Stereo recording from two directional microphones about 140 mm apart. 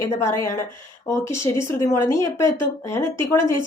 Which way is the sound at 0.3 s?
20° left (ahead or behind).